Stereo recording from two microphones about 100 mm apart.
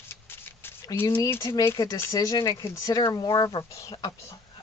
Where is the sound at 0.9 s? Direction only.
20° left (ahead or behind).